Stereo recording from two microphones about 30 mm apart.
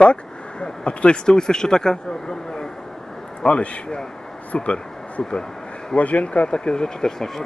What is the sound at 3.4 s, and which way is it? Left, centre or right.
Speech, left.